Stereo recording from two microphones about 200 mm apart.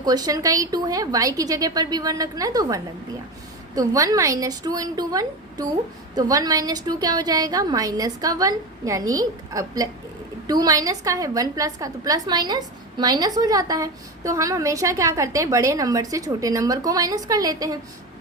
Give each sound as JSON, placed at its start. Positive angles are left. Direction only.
{"t": 0.0, "sound": "a woman's voice", "side_deg": -20}